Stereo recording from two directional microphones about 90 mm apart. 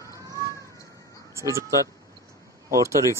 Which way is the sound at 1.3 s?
35° right (ahead or behind).